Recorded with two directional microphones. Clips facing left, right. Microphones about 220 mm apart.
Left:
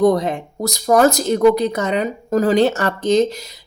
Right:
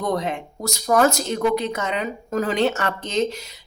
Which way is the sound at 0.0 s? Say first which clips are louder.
Left 9 dB; 35° left (ahead or behind).